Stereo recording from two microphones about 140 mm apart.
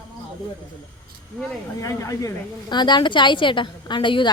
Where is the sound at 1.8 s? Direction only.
20° left (ahead or behind).